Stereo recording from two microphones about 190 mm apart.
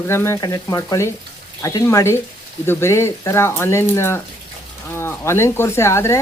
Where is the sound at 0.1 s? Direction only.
15° left (ahead or behind).